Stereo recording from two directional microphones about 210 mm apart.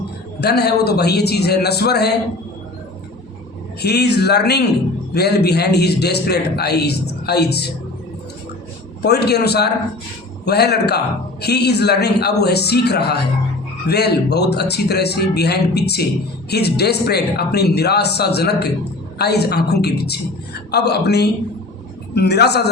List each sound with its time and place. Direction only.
0.3 s a man's voice: 50° left (ahead or behind)
3.8 s a man's voice: 50° left (ahead or behind)
9.0 s a man's voice: 50° left (ahead or behind)